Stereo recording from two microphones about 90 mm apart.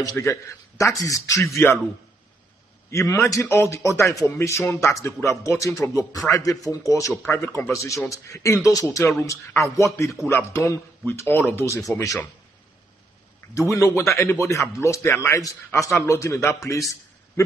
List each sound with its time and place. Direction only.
0.0 s speech: 35° left (ahead or behind)
2.9 s speech: 35° left (ahead or behind)
10.2 s speech: 30° left (ahead or behind)
13.6 s speech: 35° left (ahead or behind)